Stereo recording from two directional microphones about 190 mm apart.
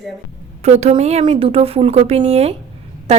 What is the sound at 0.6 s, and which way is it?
A woman's voice, 35° right (ahead or behind).